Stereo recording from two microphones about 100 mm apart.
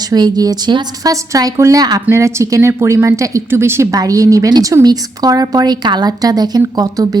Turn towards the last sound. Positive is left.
turn(degrees=-40)  # may be behind; listen again after turning